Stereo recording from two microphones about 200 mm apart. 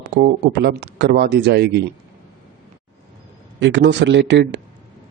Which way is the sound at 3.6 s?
60° right (ahead or behind).